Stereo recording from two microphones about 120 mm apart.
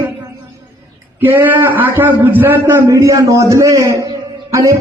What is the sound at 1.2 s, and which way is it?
A man's voice, 15° right (ahead or behind).